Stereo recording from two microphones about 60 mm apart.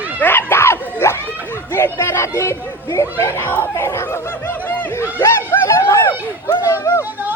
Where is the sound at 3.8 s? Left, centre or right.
Left.